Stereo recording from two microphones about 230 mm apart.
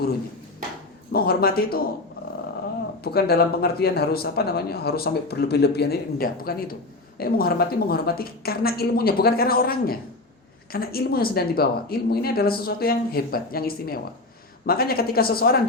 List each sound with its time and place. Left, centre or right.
1.1 s speech: left
3.0 s speech: left